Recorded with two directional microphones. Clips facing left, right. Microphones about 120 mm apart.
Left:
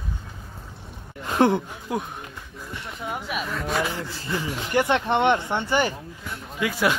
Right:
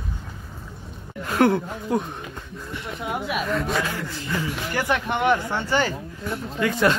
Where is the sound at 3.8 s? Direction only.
15° left (ahead or behind).